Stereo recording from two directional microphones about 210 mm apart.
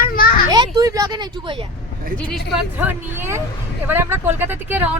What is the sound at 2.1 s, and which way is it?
Speech, 5° left (ahead or behind).